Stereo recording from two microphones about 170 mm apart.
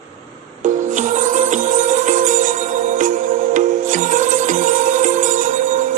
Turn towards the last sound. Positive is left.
turn(degrees=-45)  # may be behind; listen again after turning